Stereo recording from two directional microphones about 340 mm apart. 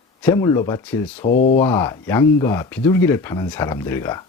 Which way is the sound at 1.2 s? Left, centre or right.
Left.